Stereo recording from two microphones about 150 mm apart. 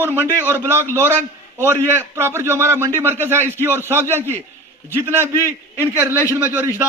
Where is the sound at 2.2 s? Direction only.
15° right (ahead or behind).